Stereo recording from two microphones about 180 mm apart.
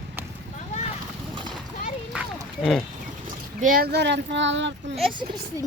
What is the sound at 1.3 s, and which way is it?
Clip-clop, 25° right (ahead or behind).